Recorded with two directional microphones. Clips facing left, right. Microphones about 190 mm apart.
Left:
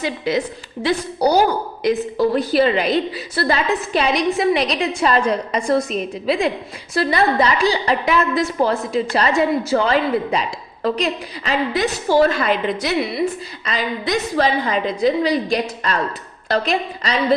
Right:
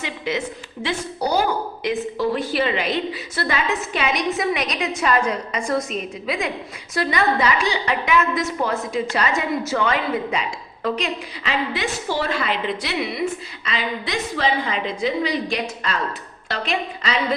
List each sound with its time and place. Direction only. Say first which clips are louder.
0.0 s a woman's voice: left 5 dB; 35° left (ahead or behind)